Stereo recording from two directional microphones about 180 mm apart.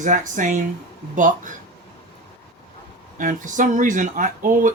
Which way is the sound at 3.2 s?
45° right (ahead or behind).